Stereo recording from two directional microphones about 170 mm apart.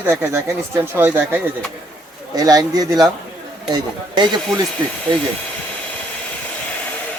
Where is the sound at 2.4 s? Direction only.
20° right (ahead or behind).